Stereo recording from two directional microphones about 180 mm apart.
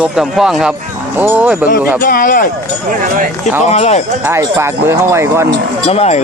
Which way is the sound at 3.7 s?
35° left (ahead or behind).